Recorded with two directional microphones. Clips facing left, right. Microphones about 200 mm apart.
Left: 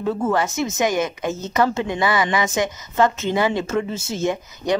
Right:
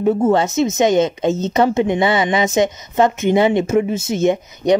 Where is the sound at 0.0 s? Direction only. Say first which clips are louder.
Right 6 dB; 25° right (ahead or behind).